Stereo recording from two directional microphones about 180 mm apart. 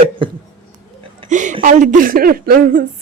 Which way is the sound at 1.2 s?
40° right (ahead or behind).